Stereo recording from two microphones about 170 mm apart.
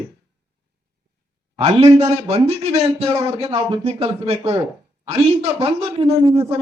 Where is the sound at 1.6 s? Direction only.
35° right (ahead or behind).